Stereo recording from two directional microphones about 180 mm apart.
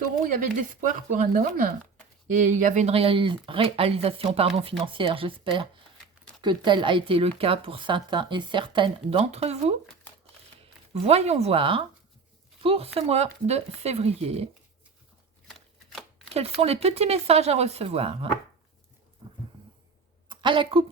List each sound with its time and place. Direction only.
0.5 s speech: 45° right (ahead or behind)
11.0 s speech: 35° right (ahead or behind)
15.4 s shuffling cards: centre (ahead or behind)
16.3 s speech: 35° right (ahead or behind)
20.2 s a sound: 25° right (ahead or behind)